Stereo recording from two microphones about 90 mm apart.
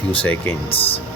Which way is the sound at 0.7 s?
90° left.